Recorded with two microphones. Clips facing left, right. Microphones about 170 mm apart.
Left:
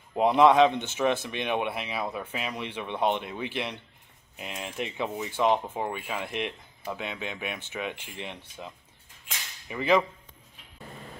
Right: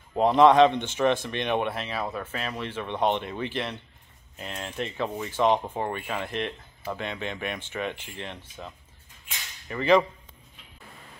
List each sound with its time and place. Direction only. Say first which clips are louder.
0.2 s speech: right 2 dB; 10° left (ahead or behind)
9.7 s speech: right 3 dB; 5° left (ahead or behind)